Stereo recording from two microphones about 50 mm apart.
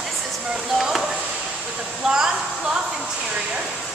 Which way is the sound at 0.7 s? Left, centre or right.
Centre.